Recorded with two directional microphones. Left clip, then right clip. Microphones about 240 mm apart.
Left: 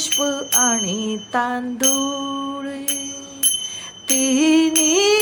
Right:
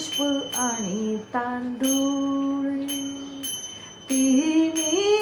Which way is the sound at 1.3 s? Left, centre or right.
Left.